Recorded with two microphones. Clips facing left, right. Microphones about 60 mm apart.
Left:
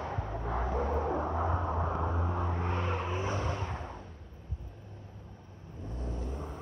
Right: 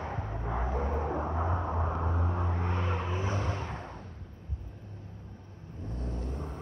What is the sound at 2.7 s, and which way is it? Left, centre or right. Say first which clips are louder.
Vehicle: even; left.